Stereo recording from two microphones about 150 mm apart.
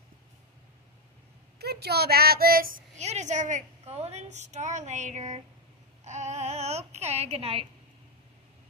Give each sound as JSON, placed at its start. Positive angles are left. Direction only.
{"t": 1.6, "sound": "speech", "side_deg": -90}
{"t": 3.0, "sound": "a woman's voice", "side_deg": -50}